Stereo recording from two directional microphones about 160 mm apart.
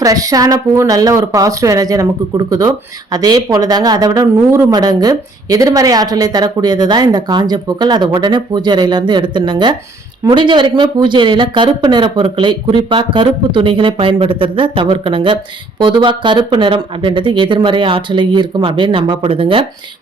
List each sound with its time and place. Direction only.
0.0 s a woman's voice: 20° right (ahead or behind)